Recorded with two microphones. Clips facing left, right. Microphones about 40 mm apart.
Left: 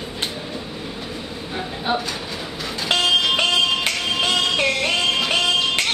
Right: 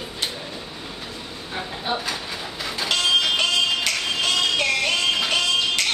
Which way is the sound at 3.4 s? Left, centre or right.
Centre.